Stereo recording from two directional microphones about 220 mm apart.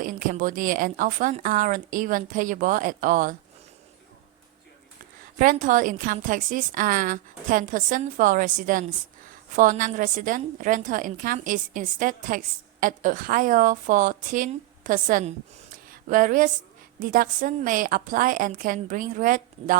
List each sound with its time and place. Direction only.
0.0 s a woman's voice: 40° right (ahead or behind)
5.4 s a woman's voice: 35° right (ahead or behind)